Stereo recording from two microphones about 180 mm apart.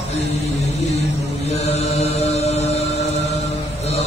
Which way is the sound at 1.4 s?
35° left (ahead or behind).